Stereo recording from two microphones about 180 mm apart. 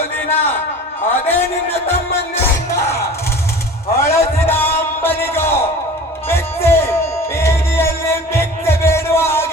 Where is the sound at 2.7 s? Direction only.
15° left (ahead or behind).